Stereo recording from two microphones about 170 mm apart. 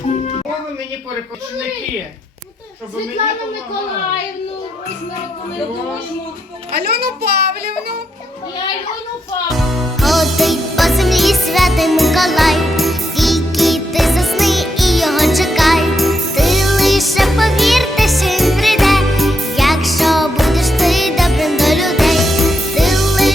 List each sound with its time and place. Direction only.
6.7 s speech: 65° right (ahead or behind)
9.5 s music: centre (ahead or behind)